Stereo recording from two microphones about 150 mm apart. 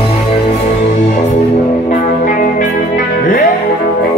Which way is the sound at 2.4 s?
60° left (ahead or behind).